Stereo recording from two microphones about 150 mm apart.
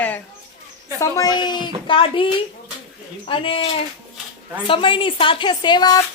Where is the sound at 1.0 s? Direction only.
25° left (ahead or behind).